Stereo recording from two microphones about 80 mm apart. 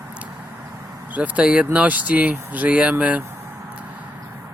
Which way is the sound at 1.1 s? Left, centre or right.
Centre.